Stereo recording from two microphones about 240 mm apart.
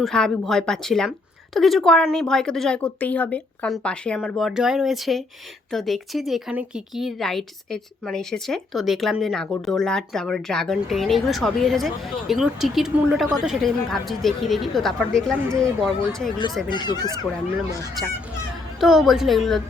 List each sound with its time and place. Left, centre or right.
0.0 s speech: centre
16.6 s speech: centre
18.8 s speech: centre